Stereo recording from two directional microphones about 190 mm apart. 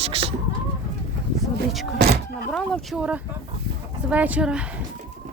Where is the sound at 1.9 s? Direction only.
55° right (ahead or behind).